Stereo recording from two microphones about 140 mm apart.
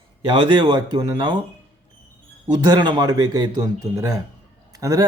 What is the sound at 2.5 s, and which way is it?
Speech, 30° right (ahead or behind).